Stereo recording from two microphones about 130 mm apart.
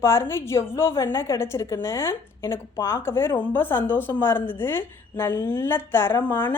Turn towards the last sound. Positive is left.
turn(degrees=15)  # may be behind; listen again after turning